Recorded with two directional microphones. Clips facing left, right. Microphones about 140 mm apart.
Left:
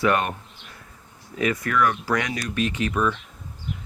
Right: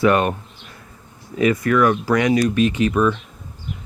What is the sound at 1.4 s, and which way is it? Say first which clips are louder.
Speech: right 6 dB; 15° right (ahead or behind).